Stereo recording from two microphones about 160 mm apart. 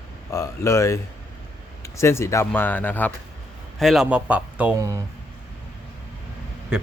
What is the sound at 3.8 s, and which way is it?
Speech, centre (ahead or behind).